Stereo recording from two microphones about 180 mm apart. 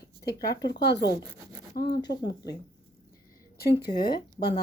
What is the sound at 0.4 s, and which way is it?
Speech, 65° left (ahead or behind).